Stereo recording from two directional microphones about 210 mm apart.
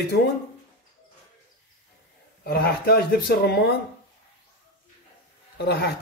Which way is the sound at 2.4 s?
45° left (ahead or behind).